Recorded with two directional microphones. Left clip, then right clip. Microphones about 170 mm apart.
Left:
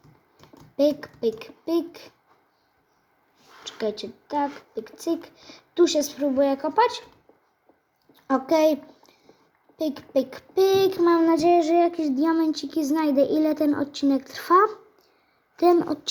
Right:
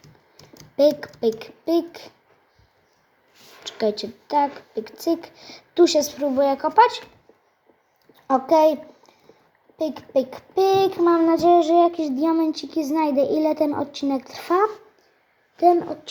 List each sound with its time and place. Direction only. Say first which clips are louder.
0.8 s speech: right 4 dB; 5° right (ahead or behind)
3.6 s speech: right 5 dB; 10° right (ahead or behind)
8.3 s a child's voice: right 4 dB; 5° left (ahead or behind)
9.7 s child singing: right 2 dB; 5° left (ahead or behind)
15.5 s a woman's voice: right 2 dB; 20° left (ahead or behind)